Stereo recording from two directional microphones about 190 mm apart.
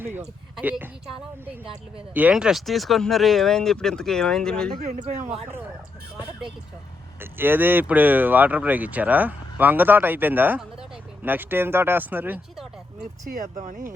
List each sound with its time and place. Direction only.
0.5 s speech: 10° right (ahead or behind)
2.1 s speech: 5° right (ahead or behind)
4.8 s speech: 40° right (ahead or behind)
7.2 s speech: 10° right (ahead or behind)
13.3 s speech: 40° right (ahead or behind)